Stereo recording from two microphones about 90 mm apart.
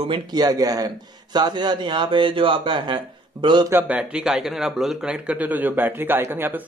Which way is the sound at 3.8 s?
10° right (ahead or behind).